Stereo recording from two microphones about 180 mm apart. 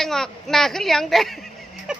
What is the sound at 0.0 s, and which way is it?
A woman's voice, centre (ahead or behind).